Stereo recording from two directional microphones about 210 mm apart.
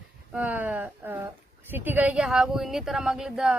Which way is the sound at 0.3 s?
5° right (ahead or behind).